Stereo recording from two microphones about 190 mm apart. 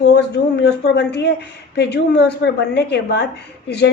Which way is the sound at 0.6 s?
60° left (ahead or behind).